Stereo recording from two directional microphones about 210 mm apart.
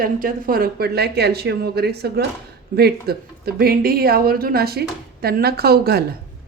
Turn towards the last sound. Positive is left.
turn(degrees=-50)  # may be behind; listen again after turning